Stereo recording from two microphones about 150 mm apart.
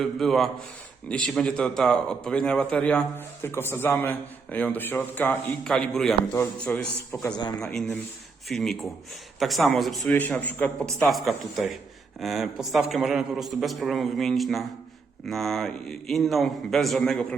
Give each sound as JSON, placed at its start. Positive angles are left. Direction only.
{"t": 0.0, "sound": "a man's voice", "side_deg": 0}
{"t": 7.1, "sound": "speech", "side_deg": 25}
{"t": 7.6, "sound": "a man's voice", "side_deg": 5}
{"t": 10.2, "sound": "a man's voice", "side_deg": 10}